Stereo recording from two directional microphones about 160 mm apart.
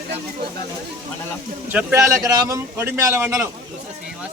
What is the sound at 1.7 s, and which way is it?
A man's voice, 15° right (ahead or behind).